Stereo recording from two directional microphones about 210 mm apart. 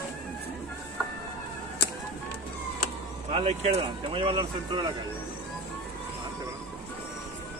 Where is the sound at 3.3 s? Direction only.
30° right (ahead or behind).